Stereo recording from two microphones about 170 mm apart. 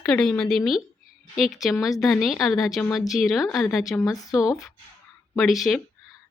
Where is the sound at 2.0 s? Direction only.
Centre (ahead or behind).